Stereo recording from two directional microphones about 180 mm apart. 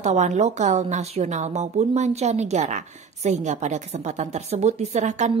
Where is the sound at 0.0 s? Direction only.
40° right (ahead or behind).